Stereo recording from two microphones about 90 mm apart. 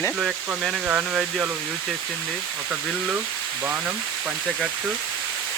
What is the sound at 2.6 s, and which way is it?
Speech, 10° right (ahead or behind).